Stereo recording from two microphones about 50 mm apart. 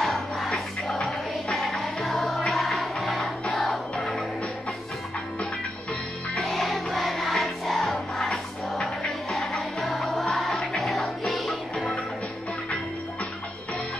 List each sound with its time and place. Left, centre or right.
0.0 s crowd: centre
0.5 s music: centre
6.4 s music: centre
11.2 s music: centre
11.7 s music: centre